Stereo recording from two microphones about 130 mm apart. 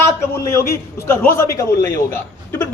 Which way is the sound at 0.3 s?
20° left (ahead or behind).